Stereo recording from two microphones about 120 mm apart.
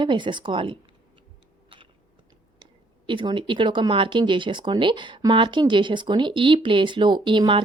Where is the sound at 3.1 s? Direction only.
40° right (ahead or behind).